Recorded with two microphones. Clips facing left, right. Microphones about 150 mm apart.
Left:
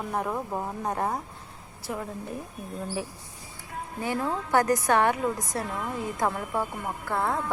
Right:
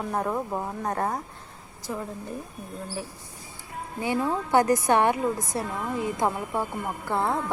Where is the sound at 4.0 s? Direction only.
15° right (ahead or behind).